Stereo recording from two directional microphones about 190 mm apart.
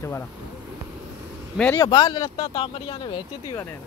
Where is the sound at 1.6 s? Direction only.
10° left (ahead or behind).